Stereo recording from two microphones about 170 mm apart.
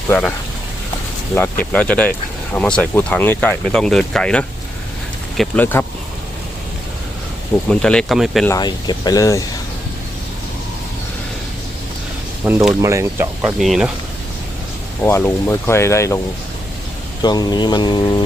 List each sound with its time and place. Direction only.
0.1 s speech: 10° left (ahead or behind)
1.4 s speech: 10° left (ahead or behind)
7.7 s speech: 5° left (ahead or behind)
8.4 s speech: 25° left (ahead or behind)
12.4 s speech: 10° right (ahead or behind)
13.6 s speech: centre (ahead or behind)
15.0 s speech: 15° left (ahead or behind)
17.2 s speech: 25° left (ahead or behind)